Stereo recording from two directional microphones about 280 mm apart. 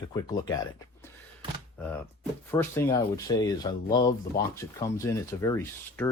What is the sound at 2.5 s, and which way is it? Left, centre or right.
Speech, centre.